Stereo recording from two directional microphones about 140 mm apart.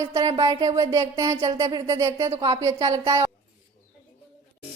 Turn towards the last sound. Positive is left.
turn(degrees=-25)  # may be behind; listen again after turning